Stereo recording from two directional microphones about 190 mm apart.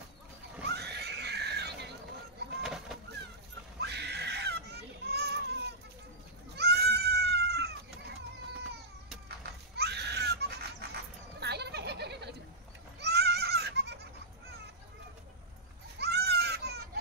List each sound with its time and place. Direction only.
0.7 s screaming: 60° right (ahead or behind)
2.6 s bird: centre (ahead or behind)
3.8 s children playing: 60° right (ahead or behind)
6.5 s goat: 60° right (ahead or behind)
9.8 s a sound: 60° right (ahead or behind)
13.0 s goat: 60° right (ahead or behind)
16.0 s goat: 60° right (ahead or behind)